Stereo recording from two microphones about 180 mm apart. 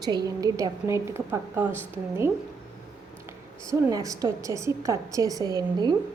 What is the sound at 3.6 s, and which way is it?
A woman's voice, 20° right (ahead or behind).